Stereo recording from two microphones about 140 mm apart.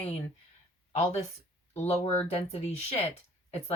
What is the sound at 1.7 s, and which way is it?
Speech, 50° left (ahead or behind).